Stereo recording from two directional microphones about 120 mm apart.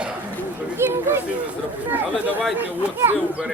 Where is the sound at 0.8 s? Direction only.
20° right (ahead or behind).